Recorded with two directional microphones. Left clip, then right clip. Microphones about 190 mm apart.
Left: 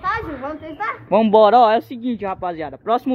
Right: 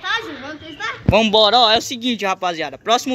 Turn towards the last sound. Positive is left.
turn(degrees=15)  # may be behind; listen again after turning